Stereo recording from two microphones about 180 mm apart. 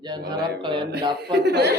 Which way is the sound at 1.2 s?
65° right (ahead or behind).